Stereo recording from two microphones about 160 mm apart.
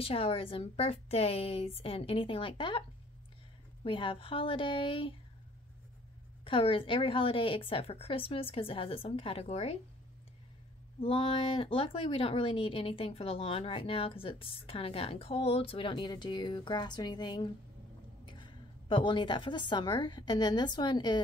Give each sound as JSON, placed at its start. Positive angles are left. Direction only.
{"t": 0.0, "sound": "speech", "side_deg": 35}
{"t": 3.8, "sound": "speech", "side_deg": 30}
{"t": 6.4, "sound": "speech", "side_deg": 35}
{"t": 11.0, "sound": "a woman's voice", "side_deg": 35}